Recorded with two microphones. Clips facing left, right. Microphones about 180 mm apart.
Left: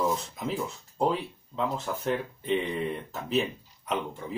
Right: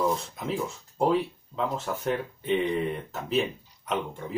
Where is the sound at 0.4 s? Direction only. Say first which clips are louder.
Right 1 dB; centre (ahead or behind).